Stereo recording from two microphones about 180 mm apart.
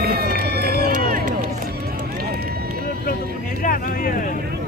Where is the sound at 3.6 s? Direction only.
50° left (ahead or behind).